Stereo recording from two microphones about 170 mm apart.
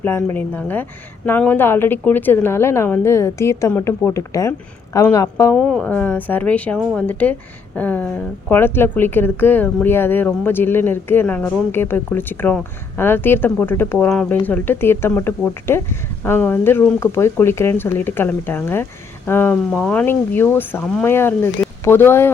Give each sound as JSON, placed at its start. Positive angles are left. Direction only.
{"t": 0.0, "sound": "speech", "side_deg": 15}
{"t": 5.5, "sound": "speech", "side_deg": 0}